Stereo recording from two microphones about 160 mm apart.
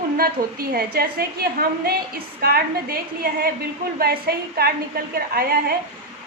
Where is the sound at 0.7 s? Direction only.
70° right (ahead or behind).